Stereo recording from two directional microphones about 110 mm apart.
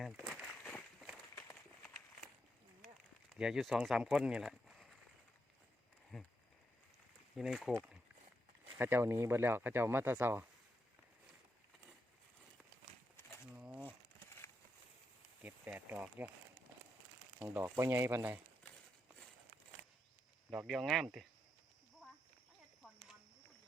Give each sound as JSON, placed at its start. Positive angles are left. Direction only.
{"t": 0.0, "sound": "a sound", "side_deg": -5}
{"t": 0.3, "sound": "a sound", "side_deg": 5}
{"t": 3.3, "sound": "speech", "side_deg": -5}
{"t": 6.1, "sound": "speech", "side_deg": 0}
{"t": 7.3, "sound": "speech", "side_deg": 0}
{"t": 8.8, "sound": "speech", "side_deg": -20}
{"t": 13.5, "sound": "crumpling", "side_deg": -15}
{"t": 15.4, "sound": "speech", "side_deg": -15}
{"t": 17.4, "sound": "speech", "side_deg": -20}
{"t": 20.5, "sound": "speech", "side_deg": 0}